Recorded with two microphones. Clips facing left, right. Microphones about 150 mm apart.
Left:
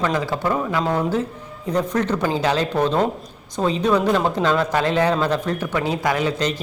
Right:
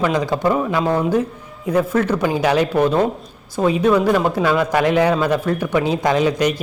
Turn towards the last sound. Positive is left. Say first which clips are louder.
# right 4 dB
turn(degrees=-15)  # may be behind; listen again after turning